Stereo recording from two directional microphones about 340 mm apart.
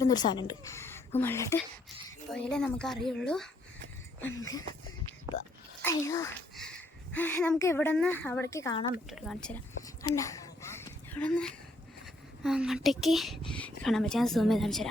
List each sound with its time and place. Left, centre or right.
0.0 s a woman's voice: centre
4.2 s speech: left
5.8 s speech: centre
9.0 s speech: centre